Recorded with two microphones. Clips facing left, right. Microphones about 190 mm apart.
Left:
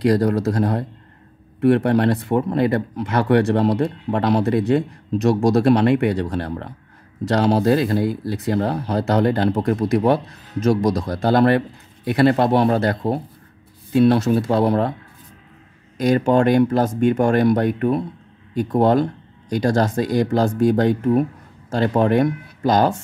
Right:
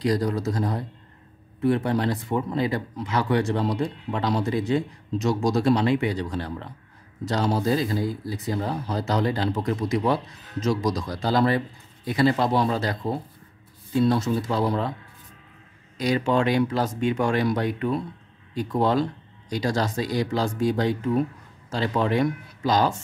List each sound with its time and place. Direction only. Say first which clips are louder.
0.0 s speech: left 7 dB; 60° left (ahead or behind)
7.2 s speech: left 7 dB; 70° left (ahead or behind)
16.0 s speech: left 6 dB; 50° left (ahead or behind)